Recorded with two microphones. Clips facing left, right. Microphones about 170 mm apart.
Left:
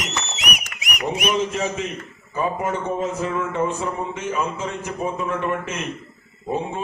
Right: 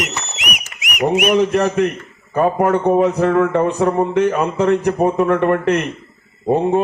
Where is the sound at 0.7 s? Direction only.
35° left (ahead or behind).